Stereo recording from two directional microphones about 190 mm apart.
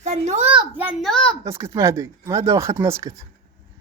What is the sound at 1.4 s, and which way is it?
Speech, 15° right (ahead or behind).